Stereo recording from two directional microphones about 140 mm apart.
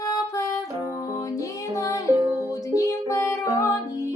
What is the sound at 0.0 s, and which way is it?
Music, 25° left (ahead or behind).